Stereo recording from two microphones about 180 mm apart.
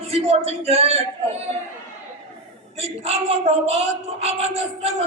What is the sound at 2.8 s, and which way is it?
Speech, 35° right (ahead or behind).